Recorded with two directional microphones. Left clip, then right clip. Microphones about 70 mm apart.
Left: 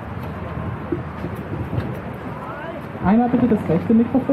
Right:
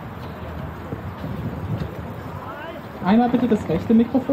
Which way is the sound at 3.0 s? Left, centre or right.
Right.